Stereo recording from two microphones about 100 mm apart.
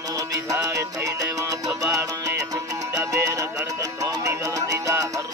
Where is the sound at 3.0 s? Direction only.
30° right (ahead or behind).